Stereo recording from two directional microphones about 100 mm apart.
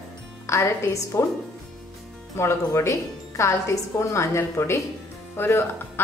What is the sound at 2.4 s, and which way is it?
A woman's voice, 30° left (ahead or behind).